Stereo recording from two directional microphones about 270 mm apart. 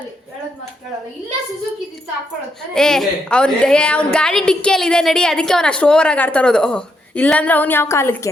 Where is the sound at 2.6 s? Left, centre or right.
Centre.